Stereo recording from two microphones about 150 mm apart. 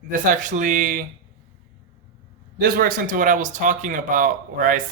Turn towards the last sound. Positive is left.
turn(degrees=-65)  # may be behind; listen again after turning